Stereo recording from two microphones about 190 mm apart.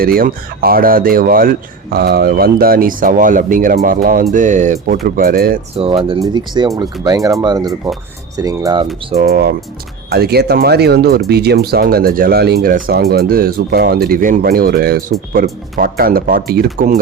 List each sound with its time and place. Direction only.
0.0 s speech: 50° right (ahead or behind)
5.7 s speech: 30° right (ahead or behind)
9.2 s speech: 55° right (ahead or behind)